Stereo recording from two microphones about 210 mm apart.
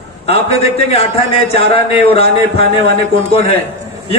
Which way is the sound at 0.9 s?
30° left (ahead or behind).